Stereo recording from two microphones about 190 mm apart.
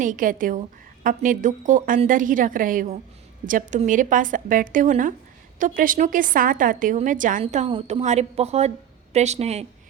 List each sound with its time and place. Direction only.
0.0 s a woman's voice: 45° right (ahead or behind)